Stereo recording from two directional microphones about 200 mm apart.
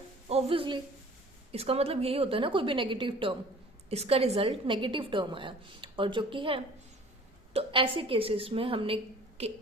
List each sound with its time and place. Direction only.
0.3 s a woman's voice: 30° right (ahead or behind)